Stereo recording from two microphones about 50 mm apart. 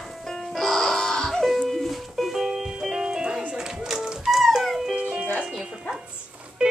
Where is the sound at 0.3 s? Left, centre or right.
Centre.